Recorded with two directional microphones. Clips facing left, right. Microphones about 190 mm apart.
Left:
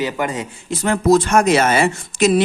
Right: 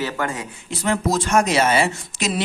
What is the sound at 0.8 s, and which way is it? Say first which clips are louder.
Speech: left 7 dB; 55° left (ahead or behind).